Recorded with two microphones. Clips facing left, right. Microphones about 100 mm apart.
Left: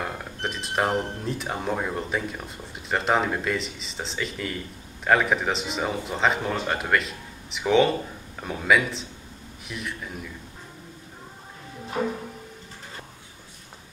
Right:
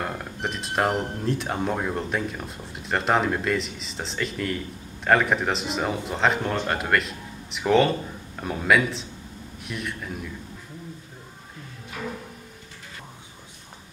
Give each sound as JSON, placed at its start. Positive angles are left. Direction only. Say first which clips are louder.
{"t": 0.0, "sound": "speech", "louder": "right 1 dB", "side_deg": 0}
{"t": 12.0, "sound": "music", "louder": "left 7 dB", "side_deg": 35}